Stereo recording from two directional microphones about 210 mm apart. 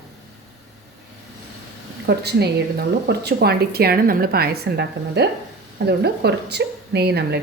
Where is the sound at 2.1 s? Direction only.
50° right (ahead or behind).